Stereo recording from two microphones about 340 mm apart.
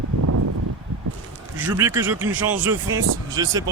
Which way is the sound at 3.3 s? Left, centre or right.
Centre.